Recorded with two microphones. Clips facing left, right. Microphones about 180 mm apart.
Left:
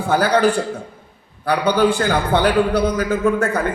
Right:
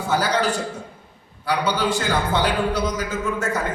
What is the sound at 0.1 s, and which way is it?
A man's voice, 55° left (ahead or behind).